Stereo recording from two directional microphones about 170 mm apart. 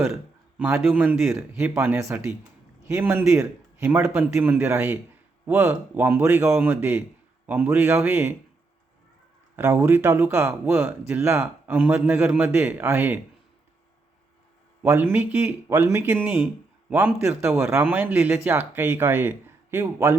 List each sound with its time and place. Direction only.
0.1 s a man's voice: 10° right (ahead or behind)
9.6 s a man's voice: 10° right (ahead or behind)
10.8 s speech: 5° right (ahead or behind)
11.2 s a man's voice: 15° right (ahead or behind)
14.8 s a man's voice: 10° right (ahead or behind)